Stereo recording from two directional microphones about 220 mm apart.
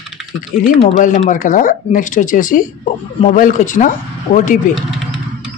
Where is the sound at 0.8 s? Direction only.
35° left (ahead or behind).